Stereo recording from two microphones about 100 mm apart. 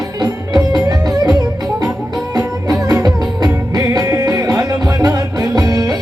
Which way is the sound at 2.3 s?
35° right (ahead or behind).